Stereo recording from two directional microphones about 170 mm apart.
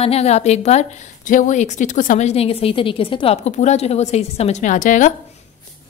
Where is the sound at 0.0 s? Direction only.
40° left (ahead or behind).